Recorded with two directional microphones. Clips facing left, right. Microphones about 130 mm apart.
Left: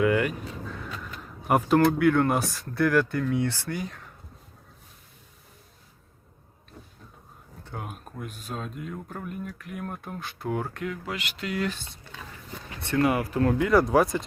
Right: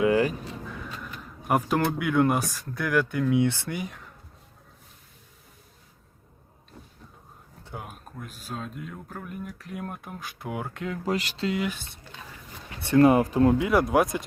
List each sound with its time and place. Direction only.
0.0 s speech: 30° right (ahead or behind)
1.5 s speech: centre (ahead or behind); by 4.0 s 20° right (ahead or behind)
7.7 s speech: centre (ahead or behind)
9.7 s speech: 15° right (ahead or behind)
10.8 s speech: 35° right (ahead or behind)
13.0 s speech: 25° right (ahead or behind); by 14.3 s 10° right (ahead or behind)